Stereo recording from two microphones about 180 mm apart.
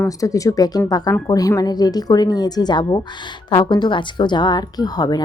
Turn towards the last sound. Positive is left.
turn(degrees=20)  # may be behind; listen again after turning